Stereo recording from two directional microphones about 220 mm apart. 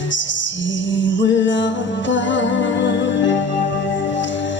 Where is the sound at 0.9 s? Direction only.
55° left (ahead or behind).